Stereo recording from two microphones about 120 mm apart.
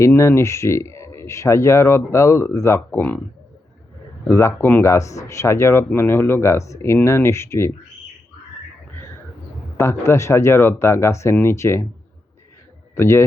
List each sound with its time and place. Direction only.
0.2 s speech: 25° left (ahead or behind)
4.3 s speech: 25° left (ahead or behind)
9.7 s speech: 25° left (ahead or behind)
13.0 s speech: 20° left (ahead or behind)